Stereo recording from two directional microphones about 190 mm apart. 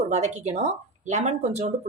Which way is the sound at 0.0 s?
35° right (ahead or behind).